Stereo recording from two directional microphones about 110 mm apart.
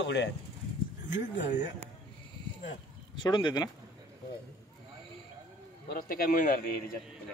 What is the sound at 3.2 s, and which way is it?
Speech, 45° left (ahead or behind).